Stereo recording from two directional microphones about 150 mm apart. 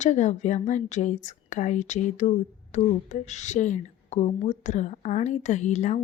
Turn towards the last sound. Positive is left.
turn(degrees=50)  # may be behind; listen again after turning